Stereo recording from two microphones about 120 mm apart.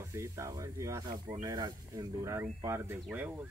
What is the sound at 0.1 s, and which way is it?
Speech, 25° right (ahead or behind).